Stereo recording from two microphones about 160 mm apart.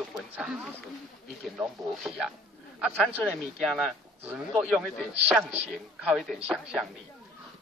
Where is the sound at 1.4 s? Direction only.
5° right (ahead or behind).